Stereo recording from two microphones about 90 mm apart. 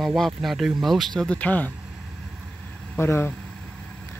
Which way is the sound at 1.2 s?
15° left (ahead or behind).